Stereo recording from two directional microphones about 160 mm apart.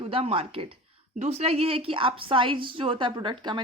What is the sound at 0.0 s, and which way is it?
A woman's voice, 35° right (ahead or behind).